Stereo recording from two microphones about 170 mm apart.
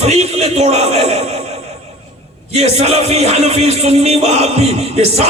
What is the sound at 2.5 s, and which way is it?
Music, 40° right (ahead or behind).